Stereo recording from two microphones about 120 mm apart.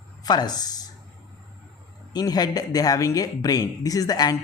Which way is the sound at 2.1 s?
35° left (ahead or behind).